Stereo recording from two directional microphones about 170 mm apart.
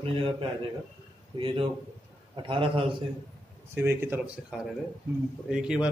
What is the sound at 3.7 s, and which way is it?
Speech, 15° right (ahead or behind).